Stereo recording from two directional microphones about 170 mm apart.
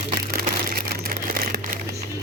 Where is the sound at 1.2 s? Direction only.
60° right (ahead or behind).